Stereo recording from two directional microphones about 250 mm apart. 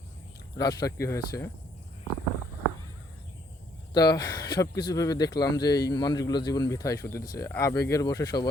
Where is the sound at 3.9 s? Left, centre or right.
Centre.